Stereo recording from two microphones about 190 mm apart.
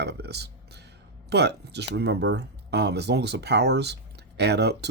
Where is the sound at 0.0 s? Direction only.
60° right (ahead or behind).